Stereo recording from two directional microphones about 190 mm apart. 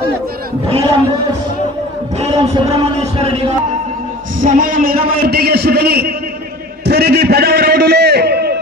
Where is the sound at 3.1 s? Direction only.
30° right (ahead or behind).